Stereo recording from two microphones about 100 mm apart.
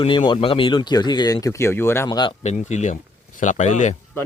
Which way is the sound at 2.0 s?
45° left (ahead or behind).